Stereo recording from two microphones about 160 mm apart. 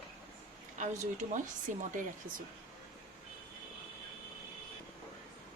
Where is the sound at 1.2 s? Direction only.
50° right (ahead or behind).